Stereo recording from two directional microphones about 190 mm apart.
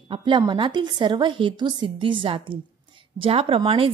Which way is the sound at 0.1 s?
25° right (ahead or behind).